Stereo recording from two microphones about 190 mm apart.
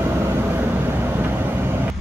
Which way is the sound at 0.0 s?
15° right (ahead or behind).